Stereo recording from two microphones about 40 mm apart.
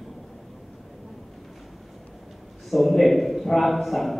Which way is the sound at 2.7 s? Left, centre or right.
Centre.